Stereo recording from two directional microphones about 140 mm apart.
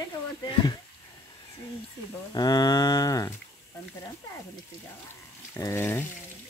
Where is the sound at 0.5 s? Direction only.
35° left (ahead or behind).